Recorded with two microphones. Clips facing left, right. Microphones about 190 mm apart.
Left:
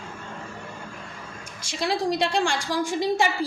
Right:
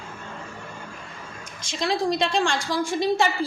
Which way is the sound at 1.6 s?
10° left (ahead or behind).